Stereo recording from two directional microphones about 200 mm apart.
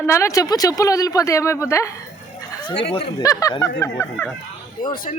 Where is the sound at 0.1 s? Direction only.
15° left (ahead or behind).